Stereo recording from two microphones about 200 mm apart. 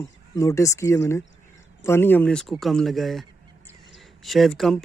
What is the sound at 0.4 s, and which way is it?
Speech, 15° left (ahead or behind).